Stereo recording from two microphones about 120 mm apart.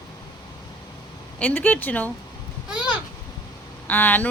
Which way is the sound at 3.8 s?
15° left (ahead or behind).